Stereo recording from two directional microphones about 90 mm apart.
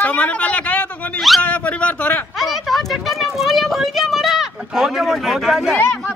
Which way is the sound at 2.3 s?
Centre (ahead or behind).